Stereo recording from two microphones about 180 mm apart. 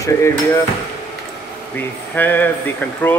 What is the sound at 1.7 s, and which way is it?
Speech, 10° left (ahead or behind).